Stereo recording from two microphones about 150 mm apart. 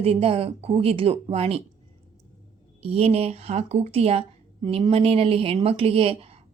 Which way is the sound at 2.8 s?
45° right (ahead or behind).